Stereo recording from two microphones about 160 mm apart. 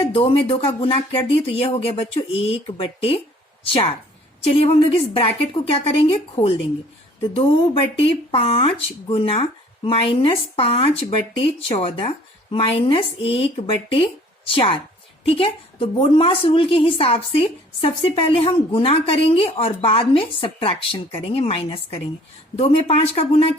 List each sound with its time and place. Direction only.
0.0 s a woman's voice: 35° left (ahead or behind)